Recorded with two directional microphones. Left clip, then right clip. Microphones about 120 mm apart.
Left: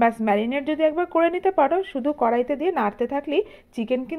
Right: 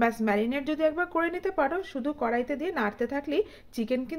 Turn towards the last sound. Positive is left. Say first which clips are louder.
# left 5 dB
turn(degrees=20)  # may be behind; listen again after turning